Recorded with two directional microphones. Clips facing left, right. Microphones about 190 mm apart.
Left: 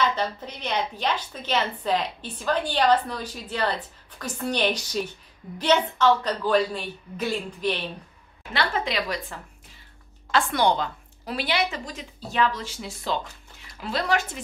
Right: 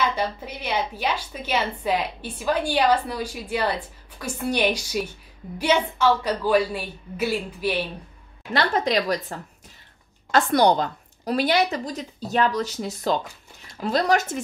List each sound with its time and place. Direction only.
0.0 s a woman's voice: 10° right (ahead or behind)
8.5 s a woman's voice: 40° right (ahead or behind)